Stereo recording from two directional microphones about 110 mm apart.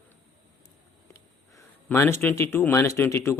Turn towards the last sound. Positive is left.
turn(degrees=25)  # may be behind; listen again after turning